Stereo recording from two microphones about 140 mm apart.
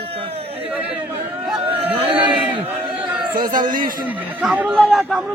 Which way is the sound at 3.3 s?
80° right.